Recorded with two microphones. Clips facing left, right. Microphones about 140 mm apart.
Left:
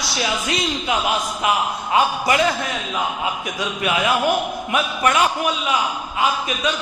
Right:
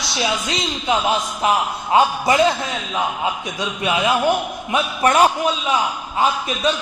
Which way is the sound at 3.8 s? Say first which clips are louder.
Right 1 dB; 25° right (ahead or behind).